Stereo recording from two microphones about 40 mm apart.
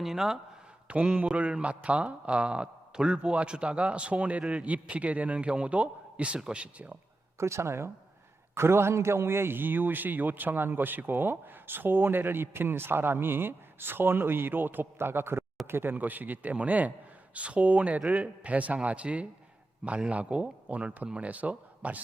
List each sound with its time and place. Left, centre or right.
0.0 s speech: centre
0.9 s a man's voice: right
5.5 s speech: right
7.6 s a man's voice: right
15.6 s speech: right
16.0 s a man's voice: right